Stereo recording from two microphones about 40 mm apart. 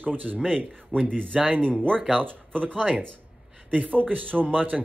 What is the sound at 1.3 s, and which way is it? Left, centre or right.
Speech, right.